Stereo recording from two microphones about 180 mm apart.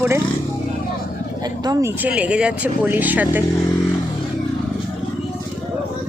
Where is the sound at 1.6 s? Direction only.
15° right (ahead or behind).